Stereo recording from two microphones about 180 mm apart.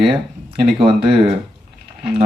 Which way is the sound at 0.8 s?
30° right (ahead or behind).